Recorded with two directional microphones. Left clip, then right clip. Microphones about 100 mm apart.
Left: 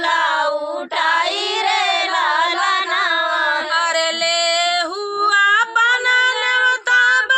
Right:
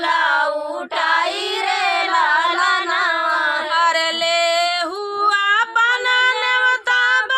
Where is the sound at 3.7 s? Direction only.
Centre (ahead or behind).